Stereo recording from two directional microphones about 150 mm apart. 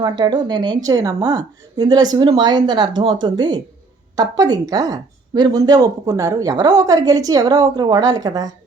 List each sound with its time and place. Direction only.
0.0 s a woman's voice: 30° right (ahead or behind)